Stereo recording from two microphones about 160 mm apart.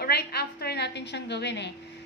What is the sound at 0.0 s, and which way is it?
A woman's voice, 80° left.